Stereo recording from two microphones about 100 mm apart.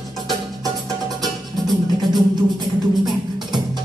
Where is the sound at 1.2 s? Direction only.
45° right (ahead or behind).